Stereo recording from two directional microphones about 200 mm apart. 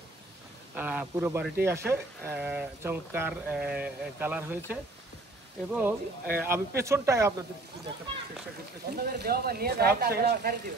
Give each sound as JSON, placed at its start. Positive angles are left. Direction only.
{"t": 0.7, "sound": "speech", "side_deg": -10}
{"t": 8.9, "sound": "speech", "side_deg": -55}